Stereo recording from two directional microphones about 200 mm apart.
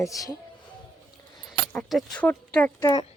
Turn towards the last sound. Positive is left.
turn(degrees=15)  # may be behind; listen again after turning